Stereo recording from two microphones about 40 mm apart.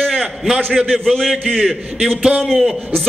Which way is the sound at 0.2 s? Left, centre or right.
Centre.